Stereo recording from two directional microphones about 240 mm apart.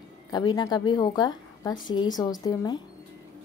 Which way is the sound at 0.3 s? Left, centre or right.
Centre.